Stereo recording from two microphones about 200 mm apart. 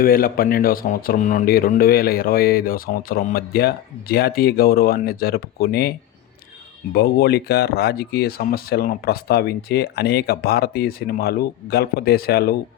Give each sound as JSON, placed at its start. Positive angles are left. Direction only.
{"t": 0.0, "sound": "speech", "side_deg": 45}
{"t": 6.9, "sound": "speech", "side_deg": 55}